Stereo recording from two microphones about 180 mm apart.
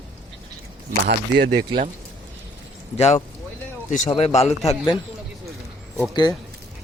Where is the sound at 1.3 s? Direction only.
70° right (ahead or behind).